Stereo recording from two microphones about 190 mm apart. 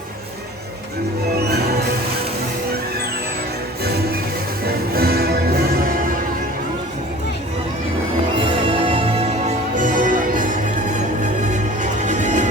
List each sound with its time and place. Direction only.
1.5 s music: 55° right (ahead or behind)
4.9 s music: 55° right (ahead or behind)
8.4 s music: 30° right (ahead or behind)